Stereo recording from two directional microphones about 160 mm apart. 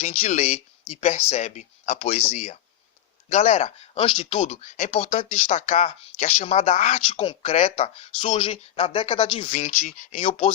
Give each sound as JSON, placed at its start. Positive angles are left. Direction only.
{"t": 0.0, "sound": "speech", "side_deg": 45}
{"t": 4.4, "sound": "speech", "side_deg": 45}
{"t": 7.1, "sound": "speech", "side_deg": 35}
{"t": 9.5, "sound": "speech", "side_deg": 50}